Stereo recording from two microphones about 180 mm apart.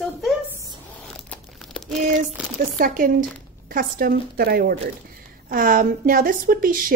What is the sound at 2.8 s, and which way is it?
Speech, 50° right (ahead or behind).